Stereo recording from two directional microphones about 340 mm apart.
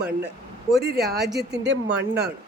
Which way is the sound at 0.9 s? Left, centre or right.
Right.